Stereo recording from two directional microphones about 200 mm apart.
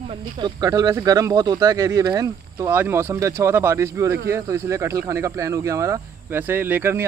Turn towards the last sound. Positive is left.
turn(degrees=-10)  # may be behind; listen again after turning